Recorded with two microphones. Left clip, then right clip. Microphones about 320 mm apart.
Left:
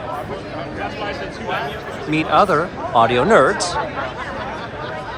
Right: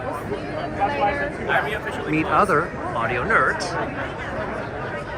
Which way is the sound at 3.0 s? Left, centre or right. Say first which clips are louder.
Left 4 dB; centre.